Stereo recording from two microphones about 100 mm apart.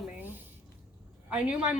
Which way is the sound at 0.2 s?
20° right (ahead or behind).